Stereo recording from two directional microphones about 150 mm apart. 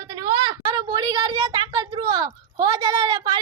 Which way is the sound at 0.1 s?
30° right (ahead or behind).